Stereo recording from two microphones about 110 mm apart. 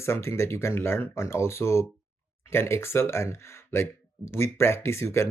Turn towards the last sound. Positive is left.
turn(degrees=25)  # may be behind; listen again after turning